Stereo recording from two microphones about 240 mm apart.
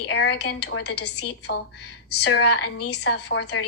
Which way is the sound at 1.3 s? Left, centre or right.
Left.